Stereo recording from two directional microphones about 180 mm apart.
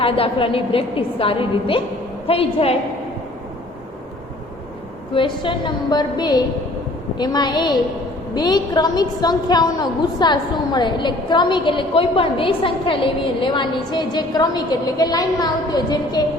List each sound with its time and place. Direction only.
0.0 s a woman's voice: 30° left (ahead or behind)
5.1 s a woman's voice: 25° left (ahead or behind)